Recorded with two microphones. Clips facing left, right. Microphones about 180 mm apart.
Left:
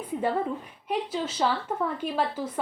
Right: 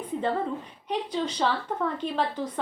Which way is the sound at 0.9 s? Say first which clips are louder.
Even; 5° left (ahead or behind).